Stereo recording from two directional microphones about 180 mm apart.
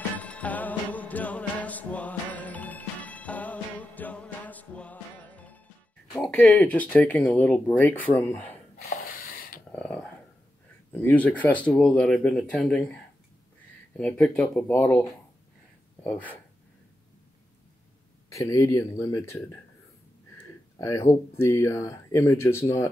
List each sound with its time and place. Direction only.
0.2 s music: 10° left (ahead or behind)
6.3 s speech: 10° left (ahead or behind)
9.7 s a sound: 5° left (ahead or behind)
10.9 s speech: 10° left (ahead or behind)
13.9 s speech: 5° left (ahead or behind)
18.3 s speech: 15° left (ahead or behind)
20.7 s speech: 15° left (ahead or behind)